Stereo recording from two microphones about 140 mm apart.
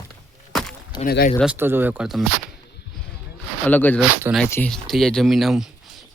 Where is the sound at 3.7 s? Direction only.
10° left (ahead or behind).